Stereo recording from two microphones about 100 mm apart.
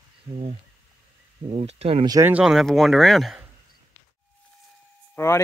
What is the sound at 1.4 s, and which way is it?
Speech, 90° right.